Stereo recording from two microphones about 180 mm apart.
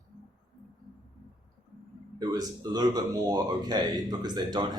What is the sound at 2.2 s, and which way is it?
Speech, 20° right (ahead or behind).